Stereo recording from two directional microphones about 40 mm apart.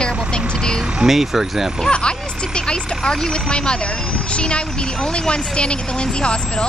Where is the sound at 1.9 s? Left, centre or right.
Left.